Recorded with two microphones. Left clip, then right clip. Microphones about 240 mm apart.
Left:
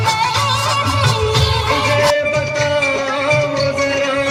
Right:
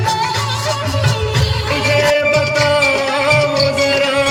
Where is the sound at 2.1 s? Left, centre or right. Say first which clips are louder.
Right 3 dB; right.